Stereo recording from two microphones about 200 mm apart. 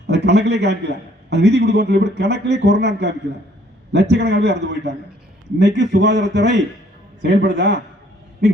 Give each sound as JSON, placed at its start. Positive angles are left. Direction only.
{"t": 0.1, "sound": "a man's voice", "side_deg": -55}